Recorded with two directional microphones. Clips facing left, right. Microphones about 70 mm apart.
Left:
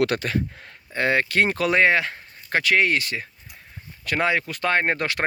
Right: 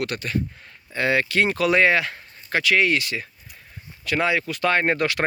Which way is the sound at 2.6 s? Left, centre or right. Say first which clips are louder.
Even; left.